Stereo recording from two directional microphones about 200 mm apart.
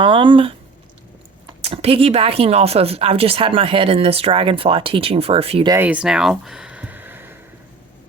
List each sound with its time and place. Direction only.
0.0 s a woman's voice: 25° right (ahead or behind)
1.6 s a woman's voice: 30° right (ahead or behind)
5.7 s a sound: 10° right (ahead or behind)